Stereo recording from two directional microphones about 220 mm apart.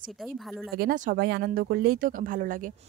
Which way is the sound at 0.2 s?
Centre (ahead or behind).